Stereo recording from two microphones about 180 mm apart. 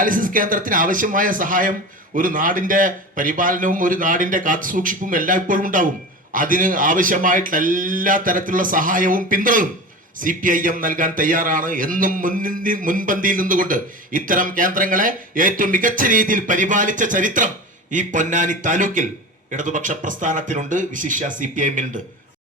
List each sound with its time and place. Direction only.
0.0 s a man's voice: 50° right (ahead or behind)